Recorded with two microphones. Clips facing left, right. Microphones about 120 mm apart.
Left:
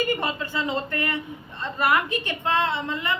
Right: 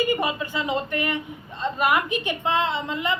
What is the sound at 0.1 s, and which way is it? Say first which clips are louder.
A woman's voice: right 2 dB; 15° right (ahead or behind).